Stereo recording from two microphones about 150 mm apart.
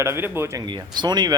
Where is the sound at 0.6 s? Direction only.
30° right (ahead or behind).